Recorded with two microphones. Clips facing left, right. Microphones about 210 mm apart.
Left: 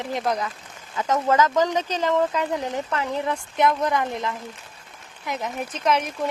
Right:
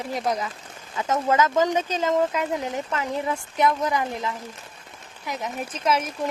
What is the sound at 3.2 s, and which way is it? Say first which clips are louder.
Speech: left 1 dB; centre (ahead or behind).